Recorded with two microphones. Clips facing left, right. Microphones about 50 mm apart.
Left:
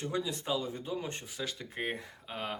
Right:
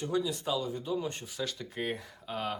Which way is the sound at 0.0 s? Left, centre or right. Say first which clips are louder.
Right 3 dB; left.